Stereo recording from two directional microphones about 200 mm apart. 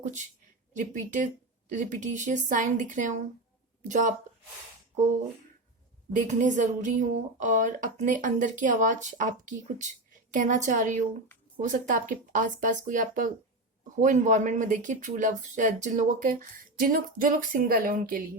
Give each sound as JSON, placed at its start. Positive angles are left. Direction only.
{"t": 0.7, "sound": "a woman's voice", "side_deg": -40}
{"t": 6.1, "sound": "a woman's voice", "side_deg": -40}